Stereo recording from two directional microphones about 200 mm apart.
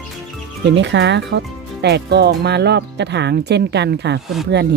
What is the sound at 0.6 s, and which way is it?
Speech, 60° right (ahead or behind).